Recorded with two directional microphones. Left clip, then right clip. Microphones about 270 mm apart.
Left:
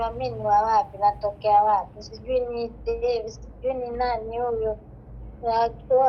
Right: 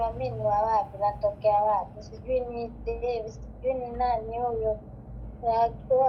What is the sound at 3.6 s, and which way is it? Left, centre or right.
A woman's voice, left.